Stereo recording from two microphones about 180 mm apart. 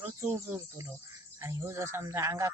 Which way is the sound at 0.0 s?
15° right (ahead or behind).